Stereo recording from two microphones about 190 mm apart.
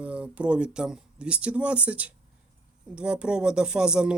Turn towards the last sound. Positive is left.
turn(degrees=-5)  # may be behind; listen again after turning